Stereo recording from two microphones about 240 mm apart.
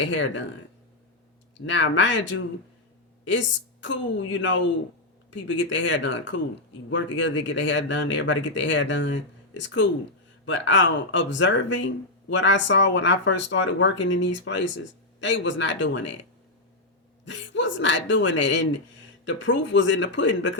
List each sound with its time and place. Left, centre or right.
0.0 s speech: left
1.5 s speech: left
17.2 s speech: left